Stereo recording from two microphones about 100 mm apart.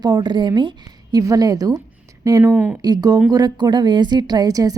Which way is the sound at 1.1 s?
40° right (ahead or behind).